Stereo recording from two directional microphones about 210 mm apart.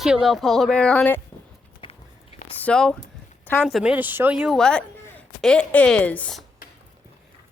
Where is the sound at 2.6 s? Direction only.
5° left (ahead or behind).